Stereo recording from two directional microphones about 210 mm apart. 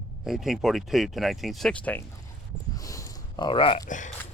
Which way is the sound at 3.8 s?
35° left (ahead or behind).